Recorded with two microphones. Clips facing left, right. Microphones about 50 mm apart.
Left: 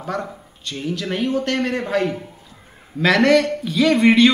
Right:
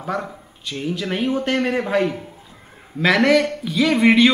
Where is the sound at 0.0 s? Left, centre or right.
Centre.